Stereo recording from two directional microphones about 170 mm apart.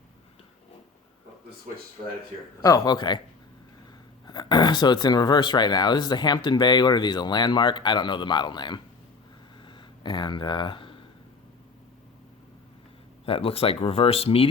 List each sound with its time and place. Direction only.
2.6 s speech: 20° left (ahead or behind)
4.3 s speech: 25° left (ahead or behind)
9.6 s a sound: 25° left (ahead or behind)
13.2 s speech: 35° left (ahead or behind)